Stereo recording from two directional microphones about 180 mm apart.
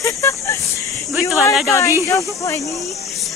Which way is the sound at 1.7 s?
15° left (ahead or behind).